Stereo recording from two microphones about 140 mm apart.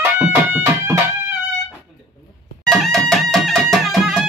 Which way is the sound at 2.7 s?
Centre (ahead or behind).